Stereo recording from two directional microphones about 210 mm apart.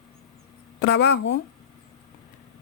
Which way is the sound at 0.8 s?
55° left (ahead or behind).